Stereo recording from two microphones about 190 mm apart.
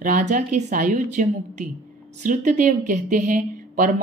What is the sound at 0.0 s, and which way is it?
A woman's voice, 40° right (ahead or behind).